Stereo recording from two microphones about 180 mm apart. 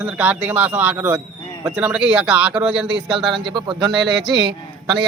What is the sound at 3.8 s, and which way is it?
Speech, centre (ahead or behind).